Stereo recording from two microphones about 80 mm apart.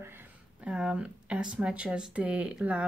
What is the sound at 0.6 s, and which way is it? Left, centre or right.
Speech, centre.